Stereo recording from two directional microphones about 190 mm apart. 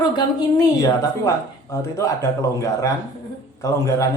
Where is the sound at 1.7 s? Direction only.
15° left (ahead or behind).